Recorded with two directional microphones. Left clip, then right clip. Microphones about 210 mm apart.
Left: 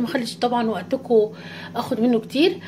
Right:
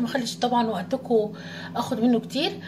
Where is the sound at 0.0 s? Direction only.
40° left (ahead or behind).